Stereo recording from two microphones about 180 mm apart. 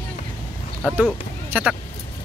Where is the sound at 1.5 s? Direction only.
10° right (ahead or behind).